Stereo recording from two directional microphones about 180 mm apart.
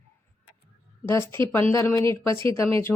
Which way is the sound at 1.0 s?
15° left (ahead or behind).